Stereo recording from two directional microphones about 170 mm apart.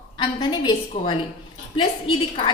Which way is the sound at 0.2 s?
30° left (ahead or behind).